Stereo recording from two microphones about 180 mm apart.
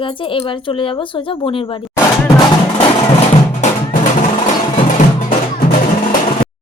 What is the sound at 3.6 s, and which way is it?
Percussion, 45° left (ahead or behind).